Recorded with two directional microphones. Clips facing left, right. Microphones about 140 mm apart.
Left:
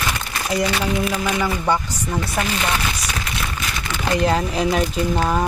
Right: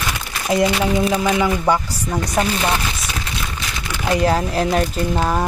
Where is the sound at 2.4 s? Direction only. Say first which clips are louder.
Right 4 dB; 30° right (ahead or behind).